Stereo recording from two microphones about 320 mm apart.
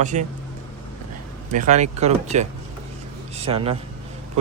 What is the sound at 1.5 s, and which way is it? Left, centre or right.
Speech, right.